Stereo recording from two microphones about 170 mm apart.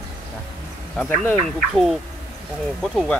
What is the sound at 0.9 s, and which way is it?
Speech, 10° left (ahead or behind).